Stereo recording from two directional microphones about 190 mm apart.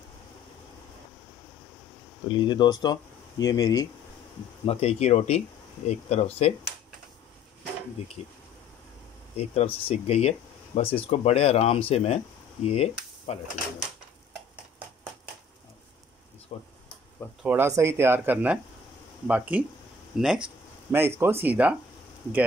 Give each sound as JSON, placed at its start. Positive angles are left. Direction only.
{"t": 2.2, "sound": "speech", "side_deg": 25}
{"t": 4.6, "sound": "speech", "side_deg": 30}
{"t": 8.0, "sound": "speech", "side_deg": 30}
{"t": 9.4, "sound": "speech", "side_deg": 30}
{"t": 16.5, "sound": "speech", "side_deg": 30}
{"t": 17.4, "sound": "speech", "side_deg": -10}